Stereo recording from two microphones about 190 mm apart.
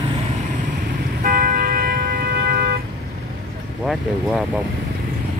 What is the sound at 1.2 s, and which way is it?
Vehicle, 50° right (ahead or behind).